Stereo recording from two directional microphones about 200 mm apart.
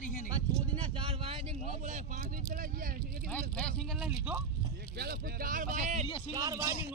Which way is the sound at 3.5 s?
5° left (ahead or behind).